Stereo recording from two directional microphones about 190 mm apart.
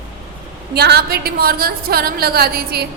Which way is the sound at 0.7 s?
60° right (ahead or behind).